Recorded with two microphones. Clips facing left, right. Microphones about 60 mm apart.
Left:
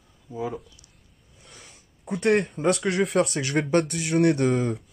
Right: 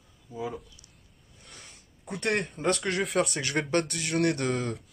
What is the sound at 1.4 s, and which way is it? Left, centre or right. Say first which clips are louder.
Speech: left 1 dB; centre.